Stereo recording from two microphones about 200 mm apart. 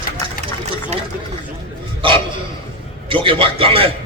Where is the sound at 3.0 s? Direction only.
25° right (ahead or behind).